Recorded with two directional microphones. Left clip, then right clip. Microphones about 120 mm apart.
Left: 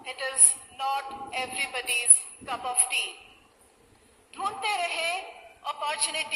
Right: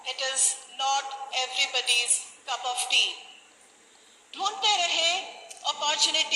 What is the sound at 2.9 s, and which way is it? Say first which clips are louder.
Speech: right 8 dB; 40° left (ahead or behind).